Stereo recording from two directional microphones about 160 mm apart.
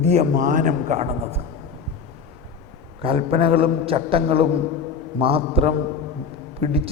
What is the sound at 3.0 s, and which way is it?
A man's voice, 35° right (ahead or behind).